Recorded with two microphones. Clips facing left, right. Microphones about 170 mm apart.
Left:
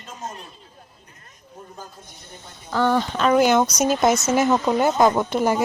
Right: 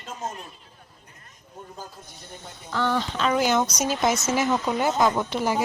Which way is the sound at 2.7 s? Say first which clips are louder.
Left 5 dB; 45° left (ahead or behind).